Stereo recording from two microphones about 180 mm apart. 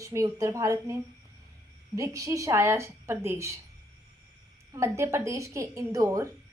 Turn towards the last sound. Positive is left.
turn(degrees=-15)  # may be behind; listen again after turning